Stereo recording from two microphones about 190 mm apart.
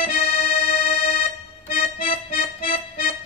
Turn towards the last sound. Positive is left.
turn(degrees=50)  # may be behind; listen again after turning